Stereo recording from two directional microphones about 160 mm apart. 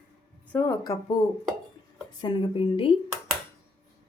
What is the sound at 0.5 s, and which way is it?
Speech, 15° left (ahead or behind).